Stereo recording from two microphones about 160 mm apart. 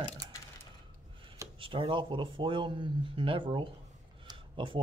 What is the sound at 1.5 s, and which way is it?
Speech, 35° right (ahead or behind).